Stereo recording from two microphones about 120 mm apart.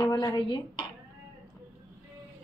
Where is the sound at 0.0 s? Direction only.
35° left (ahead or behind).